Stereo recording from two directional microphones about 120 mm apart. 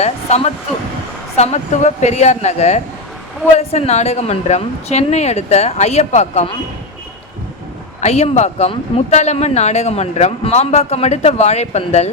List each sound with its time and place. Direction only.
0.0 s a woman's voice: 65° left (ahead or behind)
8.0 s speech: 65° left (ahead or behind)